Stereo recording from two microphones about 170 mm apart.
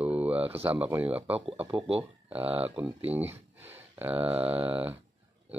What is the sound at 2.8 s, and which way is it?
Speech, 10° right (ahead or behind).